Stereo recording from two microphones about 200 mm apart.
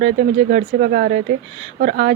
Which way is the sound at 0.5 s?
45° right (ahead or behind).